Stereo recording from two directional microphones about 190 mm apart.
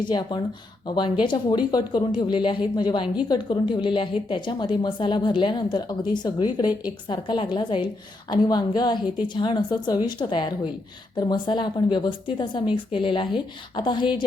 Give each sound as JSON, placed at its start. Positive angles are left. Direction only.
{"t": 0.0, "sound": "a woman's voice", "side_deg": 25}